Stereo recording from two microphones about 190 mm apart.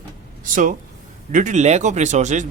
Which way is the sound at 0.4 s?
45° right (ahead or behind).